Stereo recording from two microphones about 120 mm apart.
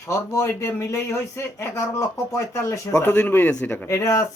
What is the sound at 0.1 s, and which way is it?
Speech, 25° left (ahead or behind).